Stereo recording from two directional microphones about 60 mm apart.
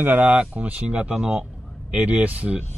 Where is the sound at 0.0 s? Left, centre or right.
Right; by 1.4 s centre.